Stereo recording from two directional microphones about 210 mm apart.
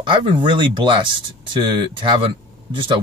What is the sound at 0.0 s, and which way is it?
Speech, 25° right (ahead or behind).